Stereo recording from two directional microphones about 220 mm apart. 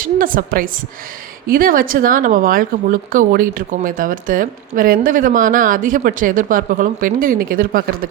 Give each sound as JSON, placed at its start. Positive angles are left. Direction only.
{"t": 0.0, "sound": "speech", "side_deg": -40}